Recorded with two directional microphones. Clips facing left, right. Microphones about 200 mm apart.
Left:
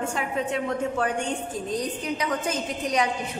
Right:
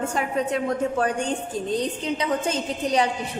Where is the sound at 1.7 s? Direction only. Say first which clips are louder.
Right 2 dB; 25° right (ahead or behind).